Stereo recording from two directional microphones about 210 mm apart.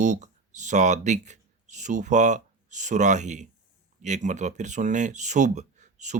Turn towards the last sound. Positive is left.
turn(degrees=-35)  # may be behind; listen again after turning